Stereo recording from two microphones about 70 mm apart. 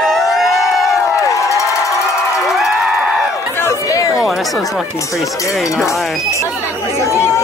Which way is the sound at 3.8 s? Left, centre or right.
Left.